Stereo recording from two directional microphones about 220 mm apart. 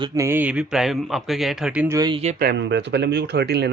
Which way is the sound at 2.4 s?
50° right (ahead or behind).